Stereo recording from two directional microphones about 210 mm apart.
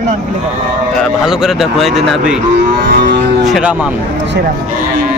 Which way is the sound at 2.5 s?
50° right (ahead or behind).